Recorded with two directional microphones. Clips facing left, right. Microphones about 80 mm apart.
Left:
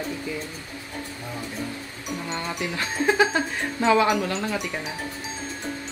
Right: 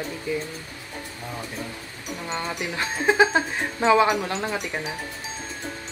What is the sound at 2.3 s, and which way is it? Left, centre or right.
Speech, right.